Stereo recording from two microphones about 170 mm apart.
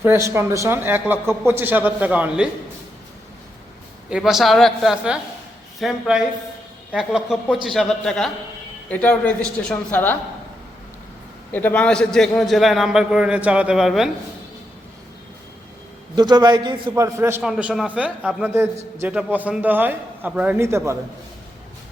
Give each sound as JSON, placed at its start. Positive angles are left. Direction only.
{"t": 0.0, "sound": "a man's voice", "side_deg": -15}
{"t": 4.1, "sound": "a man's voice", "side_deg": 0}
{"t": 11.5, "sound": "a man's voice", "side_deg": 10}
{"t": 16.1, "sound": "a man's voice", "side_deg": -25}
{"t": 16.9, "sound": "a man's voice", "side_deg": -15}
{"t": 17.4, "sound": "a man's voice", "side_deg": -5}